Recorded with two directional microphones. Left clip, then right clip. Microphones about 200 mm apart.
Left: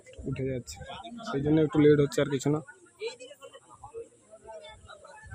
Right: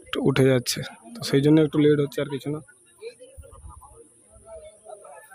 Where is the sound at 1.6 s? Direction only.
10° right (ahead or behind).